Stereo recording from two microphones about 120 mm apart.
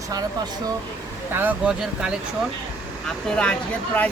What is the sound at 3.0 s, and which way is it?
Speech, 5° left (ahead or behind).